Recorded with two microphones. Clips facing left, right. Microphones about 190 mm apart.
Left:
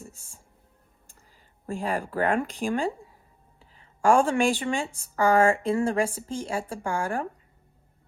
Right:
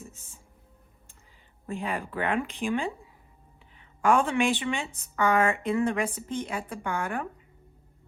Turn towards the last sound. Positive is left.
turn(degrees=30)  # may be behind; listen again after turning